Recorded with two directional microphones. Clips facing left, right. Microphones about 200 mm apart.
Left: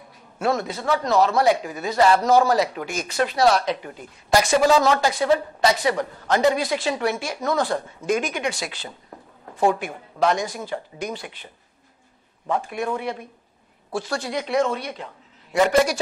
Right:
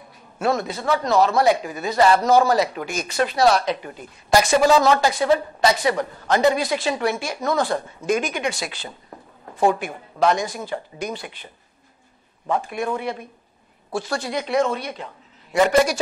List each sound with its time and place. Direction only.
0.4 s speech: 10° right (ahead or behind)
9.1 s a sound: 25° right (ahead or behind)
9.8 s speech: 15° right (ahead or behind)